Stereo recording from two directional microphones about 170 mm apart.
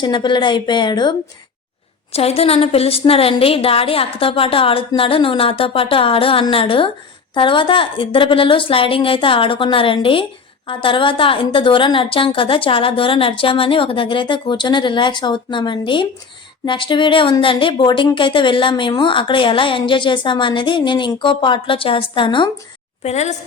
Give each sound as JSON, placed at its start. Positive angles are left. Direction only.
{"t": 0.0, "sound": "speech", "side_deg": 25}
{"t": 2.1, "sound": "a woman's voice", "side_deg": 35}
{"t": 23.0, "sound": "a woman's voice", "side_deg": 40}